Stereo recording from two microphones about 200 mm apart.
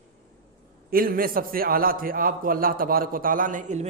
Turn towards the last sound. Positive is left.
turn(degrees=-40)  # may be behind; listen again after turning